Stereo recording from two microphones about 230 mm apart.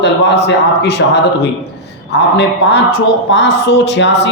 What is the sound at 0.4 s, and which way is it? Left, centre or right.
A man's voice, left.